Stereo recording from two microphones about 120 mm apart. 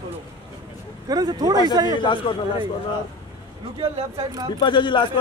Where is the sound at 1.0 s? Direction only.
35° right (ahead or behind).